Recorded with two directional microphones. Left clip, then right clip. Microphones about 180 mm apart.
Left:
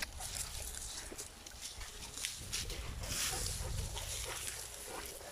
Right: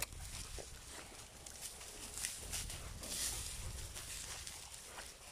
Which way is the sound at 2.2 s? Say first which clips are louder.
Left 5 dB; 55° right (ahead or behind).